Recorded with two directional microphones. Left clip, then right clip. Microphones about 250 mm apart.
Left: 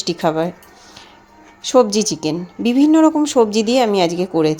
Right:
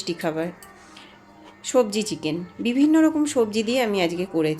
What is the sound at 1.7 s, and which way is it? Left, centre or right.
Speech, left.